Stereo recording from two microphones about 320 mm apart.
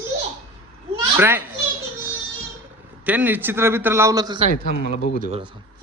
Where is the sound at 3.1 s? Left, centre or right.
Centre.